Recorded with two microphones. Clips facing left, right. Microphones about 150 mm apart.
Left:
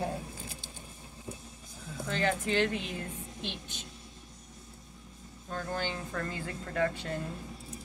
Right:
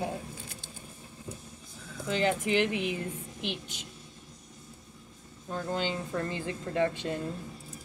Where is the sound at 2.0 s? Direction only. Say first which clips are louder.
Right 3 dB; 15° right (ahead or behind).